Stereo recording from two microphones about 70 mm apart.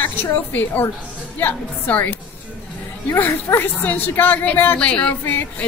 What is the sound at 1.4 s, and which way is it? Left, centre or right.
A woman's voice, left.